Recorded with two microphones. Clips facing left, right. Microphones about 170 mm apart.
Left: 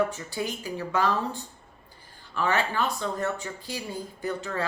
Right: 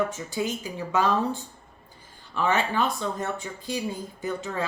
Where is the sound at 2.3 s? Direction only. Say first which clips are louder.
Right 2 dB; 20° right (ahead or behind).